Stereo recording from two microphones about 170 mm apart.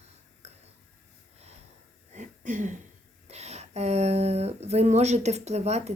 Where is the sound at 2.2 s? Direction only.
50° right (ahead or behind).